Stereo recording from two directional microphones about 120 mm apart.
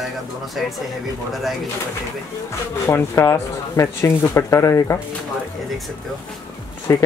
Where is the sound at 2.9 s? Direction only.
20° left (ahead or behind).